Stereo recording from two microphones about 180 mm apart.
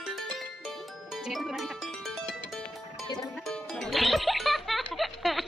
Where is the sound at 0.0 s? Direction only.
Centre (ahead or behind).